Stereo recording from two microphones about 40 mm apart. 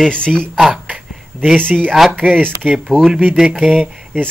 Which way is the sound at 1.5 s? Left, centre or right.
Right.